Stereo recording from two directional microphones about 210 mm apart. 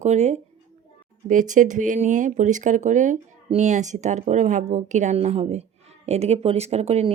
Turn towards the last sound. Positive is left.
turn(degrees=-30)  # may be behind; listen again after turning